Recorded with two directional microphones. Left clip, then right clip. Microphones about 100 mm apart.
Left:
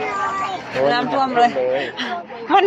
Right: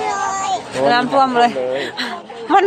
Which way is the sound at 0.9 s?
90° right.